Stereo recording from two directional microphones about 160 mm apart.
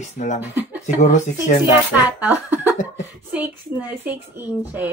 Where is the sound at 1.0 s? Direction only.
50° left (ahead or behind).